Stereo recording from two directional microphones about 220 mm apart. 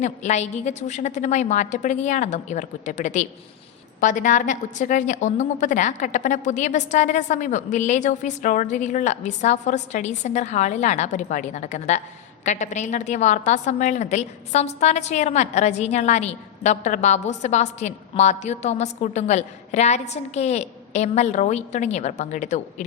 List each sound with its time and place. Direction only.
0.0 s a woman's voice: 30° left (ahead or behind)